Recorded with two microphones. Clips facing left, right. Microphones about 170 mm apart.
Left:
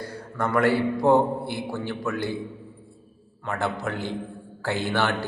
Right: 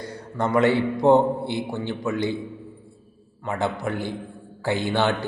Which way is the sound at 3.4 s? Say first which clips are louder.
Right 2 dB; 15° right (ahead or behind).